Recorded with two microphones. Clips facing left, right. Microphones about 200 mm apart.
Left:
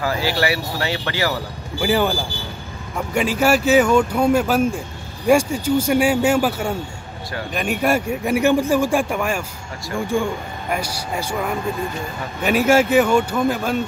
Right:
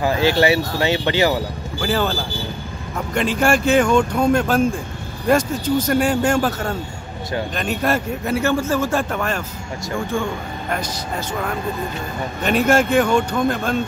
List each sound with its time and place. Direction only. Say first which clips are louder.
0.0 s speech: right 4 dB; 20° right (ahead or behind)
1.8 s a man's voice: left 2 dB; 15° left (ahead or behind)
3.2 s a man's voice: even; 5° left (ahead or behind)